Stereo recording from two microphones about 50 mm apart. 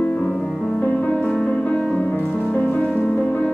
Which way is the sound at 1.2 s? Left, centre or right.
Centre.